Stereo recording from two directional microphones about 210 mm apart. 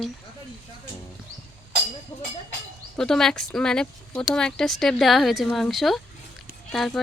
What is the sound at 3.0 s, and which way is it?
Speech, centre (ahead or behind).